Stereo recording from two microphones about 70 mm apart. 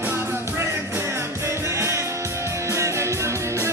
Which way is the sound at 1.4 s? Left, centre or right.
Right.